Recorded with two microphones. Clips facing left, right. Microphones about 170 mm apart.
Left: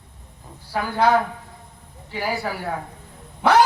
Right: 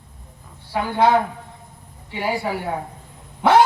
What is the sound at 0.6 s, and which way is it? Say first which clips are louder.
Speech: right 2 dB; 25° right (ahead or behind).